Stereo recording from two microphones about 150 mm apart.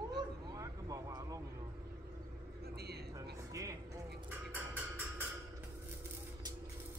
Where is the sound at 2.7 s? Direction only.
90° right.